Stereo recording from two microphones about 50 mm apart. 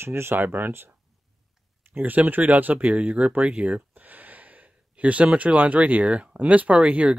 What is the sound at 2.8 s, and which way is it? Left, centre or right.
Speech, right.